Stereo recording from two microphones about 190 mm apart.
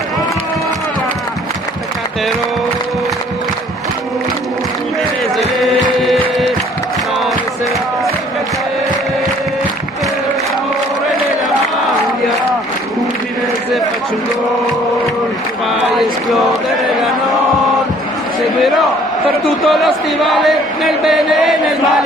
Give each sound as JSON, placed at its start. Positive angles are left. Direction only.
{"t": 6.0, "sound": "music", "side_deg": 0}
{"t": 16.0, "sound": "a sound", "side_deg": 0}
{"t": 19.6, "sound": "speech", "side_deg": 0}